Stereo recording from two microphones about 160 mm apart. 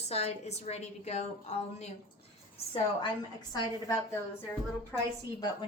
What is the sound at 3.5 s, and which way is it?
Speech, 20° left (ahead or behind).